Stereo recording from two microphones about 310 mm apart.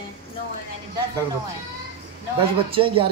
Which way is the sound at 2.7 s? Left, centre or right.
Centre.